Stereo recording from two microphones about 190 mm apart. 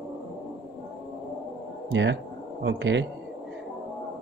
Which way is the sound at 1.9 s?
65° right (ahead or behind).